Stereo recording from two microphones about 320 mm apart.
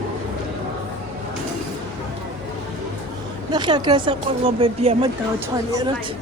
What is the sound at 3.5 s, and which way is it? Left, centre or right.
Speech, centre.